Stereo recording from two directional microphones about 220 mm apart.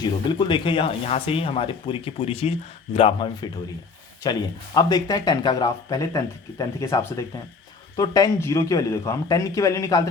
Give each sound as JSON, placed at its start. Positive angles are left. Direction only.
{"t": 0.0, "sound": "speech", "side_deg": 20}